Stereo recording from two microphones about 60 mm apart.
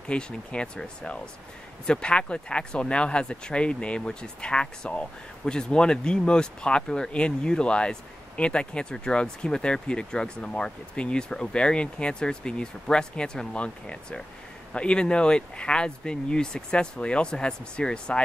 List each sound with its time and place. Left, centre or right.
0.1 s speech: centre